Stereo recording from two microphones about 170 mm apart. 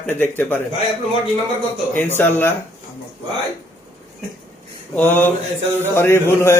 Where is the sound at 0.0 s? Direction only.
10° left (ahead or behind).